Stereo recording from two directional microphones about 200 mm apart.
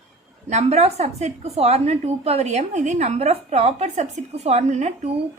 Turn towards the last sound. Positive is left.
turn(degrees=-35)  # may be behind; listen again after turning